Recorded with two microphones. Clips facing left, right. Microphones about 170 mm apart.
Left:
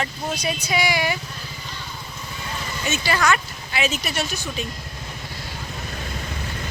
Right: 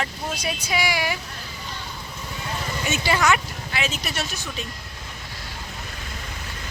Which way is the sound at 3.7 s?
5° left (ahead or behind).